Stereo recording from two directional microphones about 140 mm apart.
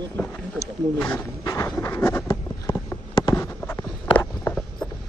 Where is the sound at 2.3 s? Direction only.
25° left (ahead or behind).